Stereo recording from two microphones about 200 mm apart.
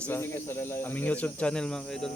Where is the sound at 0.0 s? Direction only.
10° left (ahead or behind).